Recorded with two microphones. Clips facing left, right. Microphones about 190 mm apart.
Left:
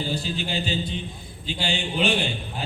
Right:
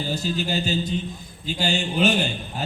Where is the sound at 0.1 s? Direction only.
45° right (ahead or behind).